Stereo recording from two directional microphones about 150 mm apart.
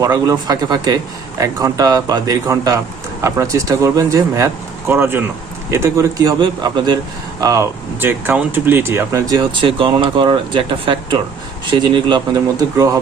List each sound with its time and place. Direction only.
0.0 s speech: 25° right (ahead or behind)